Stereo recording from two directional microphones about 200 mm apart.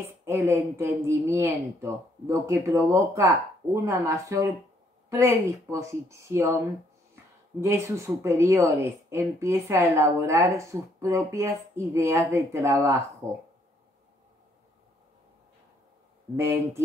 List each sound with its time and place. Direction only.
0.0 s a woman's voice: 15° right (ahead or behind)
7.6 s a woman's voice: 15° right (ahead or behind)
16.3 s a woman's voice: 15° right (ahead or behind)